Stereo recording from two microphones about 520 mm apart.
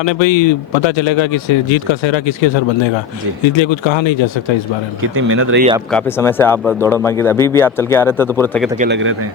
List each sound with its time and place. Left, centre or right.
0.0 s speech: left
5.1 s speech: right
5.9 s speech: centre
8.8 s speech: right